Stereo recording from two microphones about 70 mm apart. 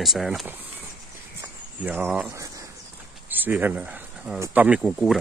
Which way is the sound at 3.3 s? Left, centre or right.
Right.